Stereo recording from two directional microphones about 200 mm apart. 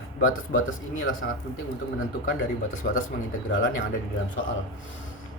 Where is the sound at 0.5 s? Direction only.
85° left.